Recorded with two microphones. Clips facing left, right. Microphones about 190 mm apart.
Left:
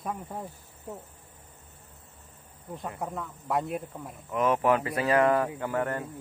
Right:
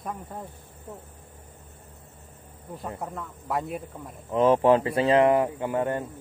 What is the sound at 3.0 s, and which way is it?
Speech, centre (ahead or behind).